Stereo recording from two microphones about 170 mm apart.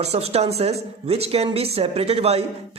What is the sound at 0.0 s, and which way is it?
Speech, 40° right (ahead or behind).